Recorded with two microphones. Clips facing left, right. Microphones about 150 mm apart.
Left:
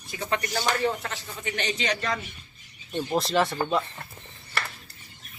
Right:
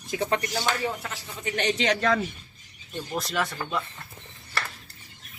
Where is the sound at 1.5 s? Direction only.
65° right (ahead or behind).